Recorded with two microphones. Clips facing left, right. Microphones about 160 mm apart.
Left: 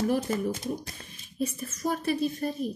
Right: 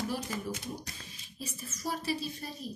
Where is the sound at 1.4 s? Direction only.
55° left (ahead or behind).